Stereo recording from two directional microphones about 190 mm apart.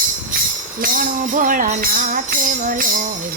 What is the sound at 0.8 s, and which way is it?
Music, 45° right (ahead or behind).